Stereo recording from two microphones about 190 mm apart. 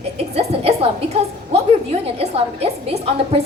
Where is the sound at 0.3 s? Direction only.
30° right (ahead or behind).